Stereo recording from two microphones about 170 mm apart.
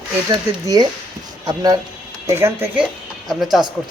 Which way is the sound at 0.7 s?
25° right (ahead or behind).